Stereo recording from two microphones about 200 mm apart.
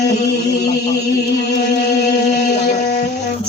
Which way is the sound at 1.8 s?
55° left (ahead or behind).